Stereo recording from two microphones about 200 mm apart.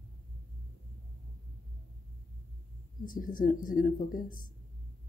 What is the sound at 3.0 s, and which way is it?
Speech, 45° left (ahead or behind).